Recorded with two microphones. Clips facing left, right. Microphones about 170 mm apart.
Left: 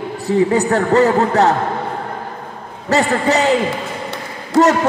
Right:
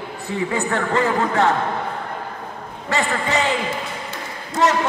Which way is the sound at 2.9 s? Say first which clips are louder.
Left 7 dB; 40° left (ahead or behind).